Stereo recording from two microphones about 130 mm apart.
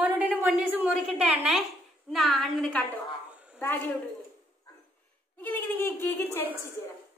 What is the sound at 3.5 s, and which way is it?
Speech, 15° left (ahead or behind).